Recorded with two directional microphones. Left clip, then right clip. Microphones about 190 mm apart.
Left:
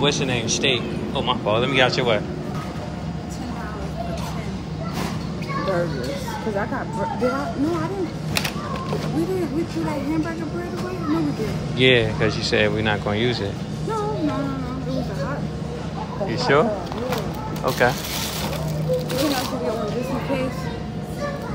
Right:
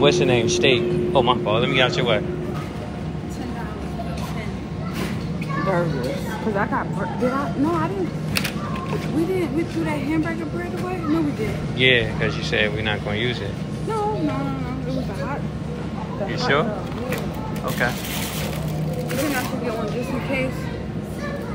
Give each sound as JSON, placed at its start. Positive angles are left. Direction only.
{"t": 0.0, "sound": "a man's voice", "side_deg": 0}
{"t": 1.4, "sound": "speech", "side_deg": 25}
{"t": 11.8, "sound": "speech", "side_deg": 25}
{"t": 16.3, "sound": "speech", "side_deg": 25}